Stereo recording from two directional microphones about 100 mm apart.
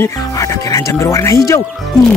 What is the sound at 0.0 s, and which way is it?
Speech, 30° left (ahead or behind).